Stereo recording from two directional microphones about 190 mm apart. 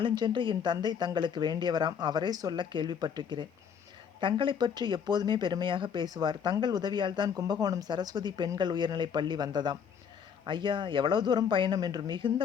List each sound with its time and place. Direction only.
0.0 s speech: 25° right (ahead or behind)